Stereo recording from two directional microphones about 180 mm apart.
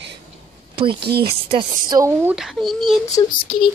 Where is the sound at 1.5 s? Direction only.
25° right (ahead or behind).